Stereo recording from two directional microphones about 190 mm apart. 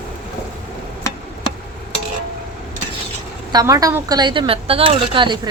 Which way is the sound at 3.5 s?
20° right (ahead or behind).